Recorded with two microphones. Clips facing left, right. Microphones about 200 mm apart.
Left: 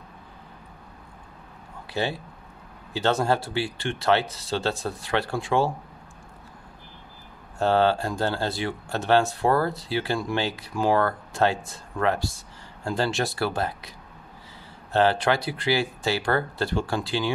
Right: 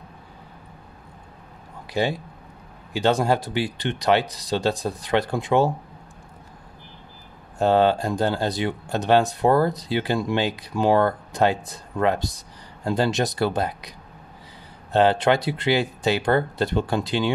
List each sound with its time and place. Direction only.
1.9 s speech: 15° right (ahead or behind)
7.5 s speech: 15° right (ahead or behind)